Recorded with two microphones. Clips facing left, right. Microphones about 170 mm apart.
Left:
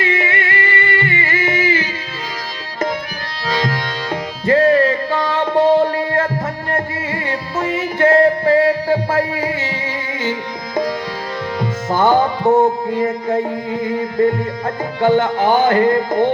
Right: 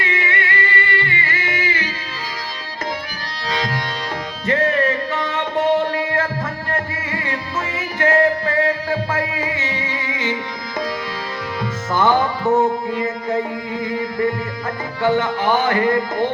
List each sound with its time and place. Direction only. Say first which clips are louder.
0.0 s music: left 4 dB; 25° left (ahead or behind)
4.1 s music: left 7 dB; 30° left (ahead or behind)
11.6 s music: left 2 dB; 25° left (ahead or behind)